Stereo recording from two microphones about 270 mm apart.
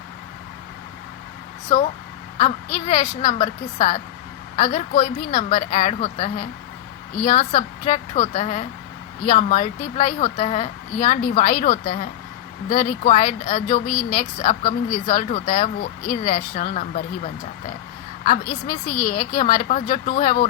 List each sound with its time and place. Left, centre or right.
2.4 s speech: left
18.9 s speech: left